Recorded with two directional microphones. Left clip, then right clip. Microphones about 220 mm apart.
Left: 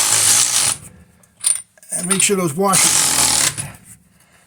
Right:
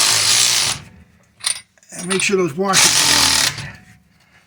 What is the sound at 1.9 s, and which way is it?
Speech, 60° left (ahead or behind).